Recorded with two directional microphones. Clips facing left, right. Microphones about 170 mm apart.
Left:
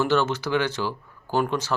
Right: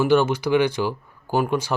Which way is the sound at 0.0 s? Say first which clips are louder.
Right 4 dB; 10° right (ahead or behind).